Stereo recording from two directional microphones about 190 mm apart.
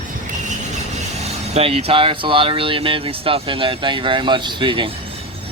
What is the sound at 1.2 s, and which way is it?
Speech, 30° right (ahead or behind).